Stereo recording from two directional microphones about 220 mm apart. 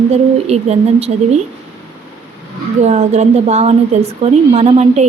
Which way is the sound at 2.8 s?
30° right (ahead or behind).